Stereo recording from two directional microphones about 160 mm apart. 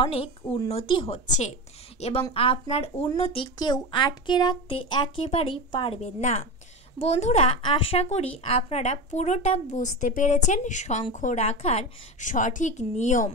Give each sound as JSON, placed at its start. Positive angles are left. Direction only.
{"t": 0.0, "sound": "a woman's voice", "side_deg": 35}
{"t": 3.5, "sound": "speech", "side_deg": 25}
{"t": 7.1, "sound": "speech", "side_deg": 40}